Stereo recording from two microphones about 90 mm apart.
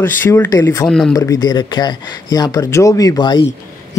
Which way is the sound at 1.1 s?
40° left (ahead or behind).